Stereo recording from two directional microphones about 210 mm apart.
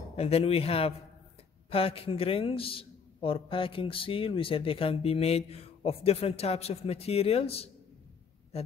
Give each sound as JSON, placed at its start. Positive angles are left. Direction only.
{"t": 0.1, "sound": "a man's voice", "side_deg": 30}